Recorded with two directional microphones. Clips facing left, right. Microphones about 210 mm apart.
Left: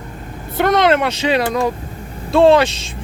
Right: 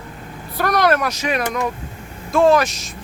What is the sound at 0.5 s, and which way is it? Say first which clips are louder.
Speech: left 4 dB; 25° left (ahead or behind).